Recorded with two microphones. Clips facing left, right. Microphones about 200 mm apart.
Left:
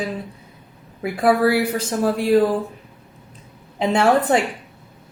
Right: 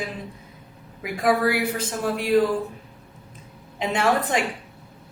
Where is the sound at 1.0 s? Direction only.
30° left (ahead or behind).